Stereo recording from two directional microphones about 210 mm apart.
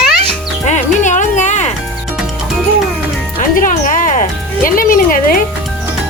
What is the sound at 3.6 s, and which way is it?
Music, 40° left (ahead or behind).